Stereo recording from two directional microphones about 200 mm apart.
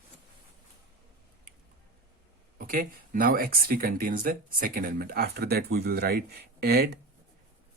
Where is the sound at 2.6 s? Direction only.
45° right (ahead or behind).